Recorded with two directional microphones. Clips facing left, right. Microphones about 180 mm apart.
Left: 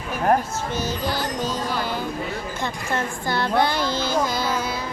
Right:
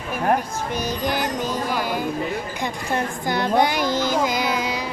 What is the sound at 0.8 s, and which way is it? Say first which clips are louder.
Music: right 2 dB; 15° right (ahead or behind).